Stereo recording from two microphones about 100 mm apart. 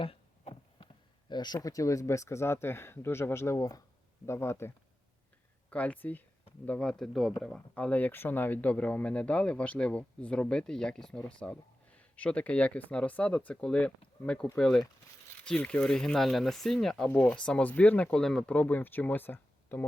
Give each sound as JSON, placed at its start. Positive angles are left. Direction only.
{"t": 0.0, "sound": "a sound", "side_deg": 65}
{"t": 1.3, "sound": "speech", "side_deg": 45}
{"t": 1.5, "sound": "speech", "side_deg": 35}
{"t": 5.7, "sound": "speech", "side_deg": 15}
{"t": 7.8, "sound": "speech", "side_deg": 15}
{"t": 17.1, "sound": "speech", "side_deg": 15}